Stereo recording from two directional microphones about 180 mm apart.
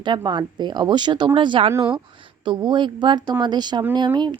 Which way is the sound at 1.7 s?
15° right (ahead or behind).